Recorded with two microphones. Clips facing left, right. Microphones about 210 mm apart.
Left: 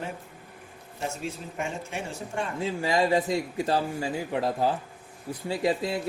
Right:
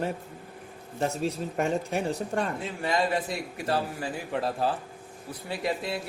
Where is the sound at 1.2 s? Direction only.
40° right (ahead or behind).